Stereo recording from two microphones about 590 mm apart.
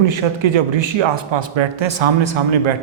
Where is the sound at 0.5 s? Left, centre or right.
Right.